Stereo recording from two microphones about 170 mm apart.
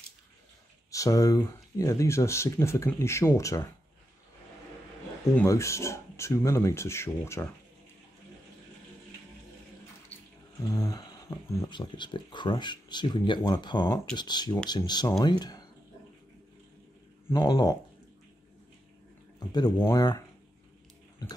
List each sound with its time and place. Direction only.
0.9 s speech: 20° left (ahead or behind)
5.5 s speech: 15° left (ahead or behind)
10.7 s speech: 20° left (ahead or behind)
17.3 s speech: 20° left (ahead or behind)
19.5 s speech: 20° left (ahead or behind)